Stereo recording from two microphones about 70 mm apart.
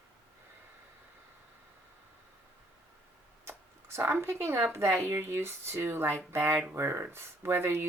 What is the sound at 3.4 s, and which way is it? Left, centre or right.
Speech, right.